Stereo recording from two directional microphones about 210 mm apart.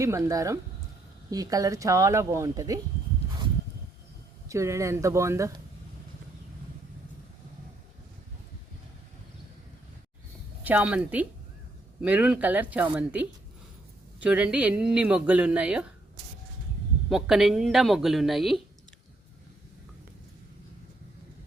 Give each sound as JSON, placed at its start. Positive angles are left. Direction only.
{"t": 0.0, "sound": "speech", "side_deg": -15}
{"t": 4.4, "sound": "speech", "side_deg": -15}
{"t": 10.6, "sound": "speech", "side_deg": -5}
{"t": 17.1, "sound": "speech", "side_deg": 0}